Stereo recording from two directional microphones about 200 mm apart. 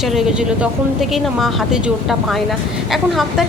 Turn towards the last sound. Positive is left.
turn(degrees=0)  # may be behind; listen again after turning